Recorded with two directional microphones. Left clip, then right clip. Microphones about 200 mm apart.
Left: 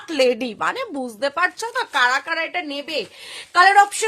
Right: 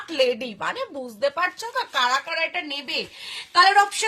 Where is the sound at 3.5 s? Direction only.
40° left (ahead or behind).